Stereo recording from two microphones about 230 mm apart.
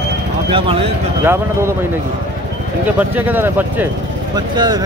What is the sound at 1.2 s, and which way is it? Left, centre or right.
Speech, centre.